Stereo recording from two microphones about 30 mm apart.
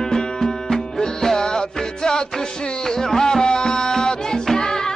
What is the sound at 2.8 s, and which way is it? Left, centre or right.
Music, centre.